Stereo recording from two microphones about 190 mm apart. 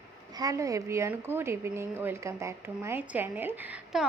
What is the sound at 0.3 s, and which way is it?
A woman's voice, 20° right (ahead or behind).